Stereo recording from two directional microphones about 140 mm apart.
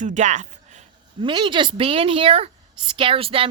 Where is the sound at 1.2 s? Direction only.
35° right (ahead or behind).